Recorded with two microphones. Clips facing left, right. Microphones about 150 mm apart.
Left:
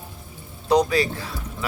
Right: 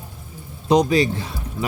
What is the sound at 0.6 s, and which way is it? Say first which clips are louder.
Speech: right 3 dB; 20° right (ahead or behind).